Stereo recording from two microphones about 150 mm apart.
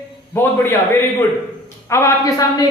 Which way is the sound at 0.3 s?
15° left (ahead or behind).